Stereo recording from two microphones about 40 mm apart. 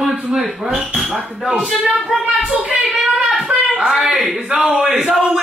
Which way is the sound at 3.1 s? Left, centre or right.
Centre.